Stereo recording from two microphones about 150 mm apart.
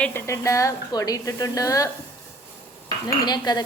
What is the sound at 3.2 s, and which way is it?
Speech, 30° left (ahead or behind).